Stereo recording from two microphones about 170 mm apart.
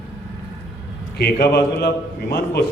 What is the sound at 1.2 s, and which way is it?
Speech, 70° left (ahead or behind).